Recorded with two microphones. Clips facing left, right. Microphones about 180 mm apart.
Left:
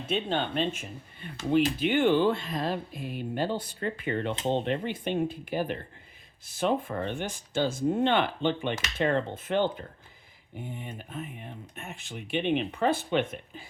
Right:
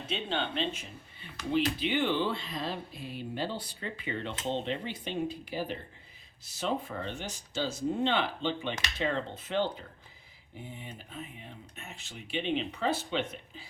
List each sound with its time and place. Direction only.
0.1 s speech: 50° left (ahead or behind)